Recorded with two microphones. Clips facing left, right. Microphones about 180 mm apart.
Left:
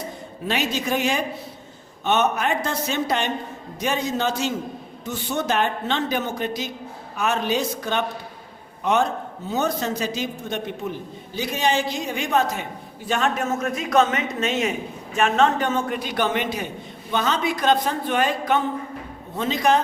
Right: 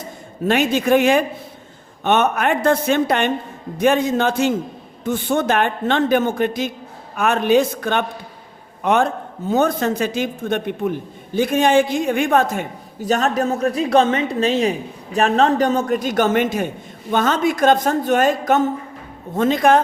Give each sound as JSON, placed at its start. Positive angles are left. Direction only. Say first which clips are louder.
{"t": 0.4, "sound": "a man's voice", "louder": "right 8 dB", "side_deg": -50}